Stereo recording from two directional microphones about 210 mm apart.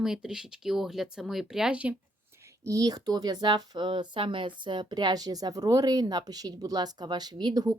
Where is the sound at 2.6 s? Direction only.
15° right (ahead or behind).